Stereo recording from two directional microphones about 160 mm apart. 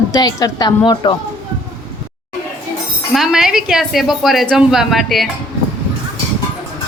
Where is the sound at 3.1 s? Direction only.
Centre (ahead or behind).